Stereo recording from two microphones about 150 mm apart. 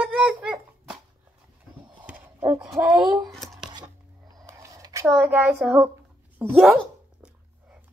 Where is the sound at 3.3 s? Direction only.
Centre (ahead or behind).